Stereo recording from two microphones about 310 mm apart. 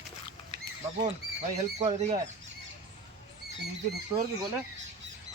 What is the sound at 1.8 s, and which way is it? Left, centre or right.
Speech, right.